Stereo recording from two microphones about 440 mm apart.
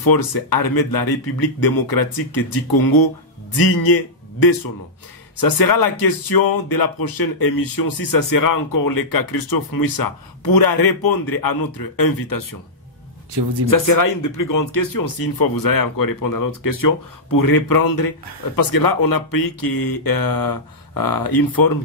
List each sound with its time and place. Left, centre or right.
0.0 s a man's voice: left
13.7 s speech: left